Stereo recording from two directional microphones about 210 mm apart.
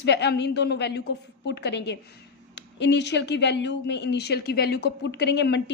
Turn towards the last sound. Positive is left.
turn(degrees=55)  # may be behind; listen again after turning